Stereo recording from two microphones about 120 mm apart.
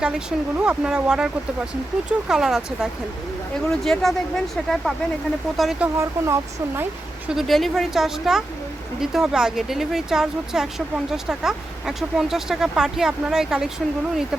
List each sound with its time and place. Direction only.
0.0 s speech: 10° right (ahead or behind)
6.0 s speech: 25° right (ahead or behind)
7.3 s speech: centre (ahead or behind)